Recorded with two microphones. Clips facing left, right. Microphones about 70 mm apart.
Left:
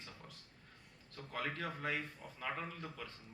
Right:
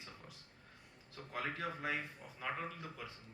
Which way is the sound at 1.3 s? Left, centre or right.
Centre.